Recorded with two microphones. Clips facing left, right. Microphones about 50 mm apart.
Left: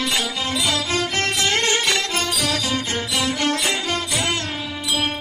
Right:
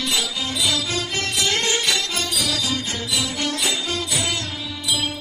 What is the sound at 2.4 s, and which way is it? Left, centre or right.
Music, left.